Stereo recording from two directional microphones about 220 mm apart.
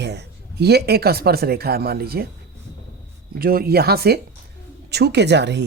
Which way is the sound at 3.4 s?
45° right (ahead or behind).